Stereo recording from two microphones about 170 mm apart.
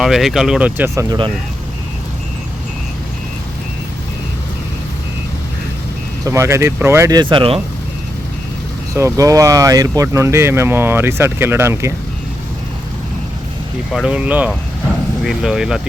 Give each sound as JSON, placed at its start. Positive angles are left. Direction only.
{"t": 0.0, "sound": "speech", "side_deg": 0}
{"t": 0.9, "sound": "speech", "side_deg": -25}
{"t": 6.2, "sound": "speech", "side_deg": -15}
{"t": 7.2, "sound": "speech", "side_deg": -30}
{"t": 8.9, "sound": "speech", "side_deg": -20}
{"t": 13.9, "sound": "speech", "side_deg": -5}